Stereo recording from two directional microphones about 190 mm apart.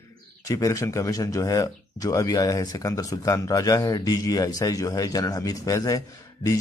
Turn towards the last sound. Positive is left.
turn(degrees=15)  # may be behind; listen again after turning